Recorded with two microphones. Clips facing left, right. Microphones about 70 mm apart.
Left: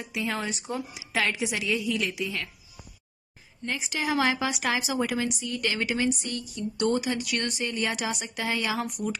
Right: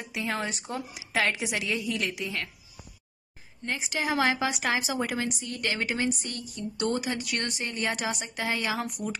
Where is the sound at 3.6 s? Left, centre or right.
Right.